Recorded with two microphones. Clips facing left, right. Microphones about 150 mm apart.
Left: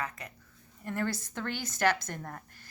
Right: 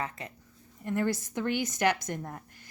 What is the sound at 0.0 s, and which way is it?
Speech, 25° right (ahead or behind).